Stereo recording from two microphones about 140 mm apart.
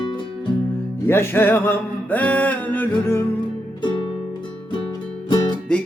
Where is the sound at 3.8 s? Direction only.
35° left (ahead or behind).